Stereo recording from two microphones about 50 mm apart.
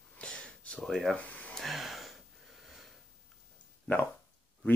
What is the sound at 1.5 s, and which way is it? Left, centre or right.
Gasp, centre.